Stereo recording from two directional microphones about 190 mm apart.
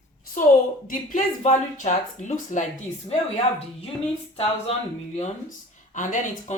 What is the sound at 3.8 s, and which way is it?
Speech, 30° left (ahead or behind).